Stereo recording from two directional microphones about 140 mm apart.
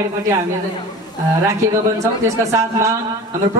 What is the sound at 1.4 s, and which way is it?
A man's voice, 20° right (ahead or behind).